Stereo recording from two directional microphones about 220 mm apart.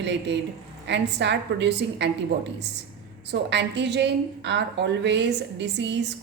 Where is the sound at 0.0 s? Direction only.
50° right (ahead or behind).